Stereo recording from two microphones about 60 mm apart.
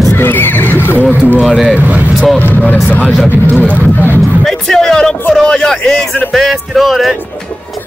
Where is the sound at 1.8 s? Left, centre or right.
Right.